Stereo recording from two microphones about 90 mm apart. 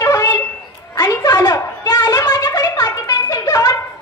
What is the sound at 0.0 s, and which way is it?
Wind instrument, 40° left (ahead or behind).